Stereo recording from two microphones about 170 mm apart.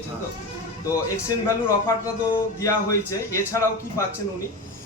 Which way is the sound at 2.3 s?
20° left (ahead or behind).